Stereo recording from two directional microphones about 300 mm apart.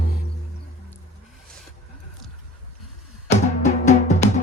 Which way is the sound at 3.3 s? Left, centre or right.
Left.